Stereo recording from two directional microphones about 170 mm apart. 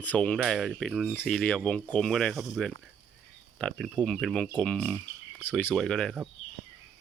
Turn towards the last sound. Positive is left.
turn(degrees=0)  # may be behind; listen again after turning